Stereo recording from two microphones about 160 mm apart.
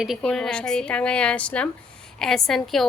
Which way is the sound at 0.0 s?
Centre (ahead or behind).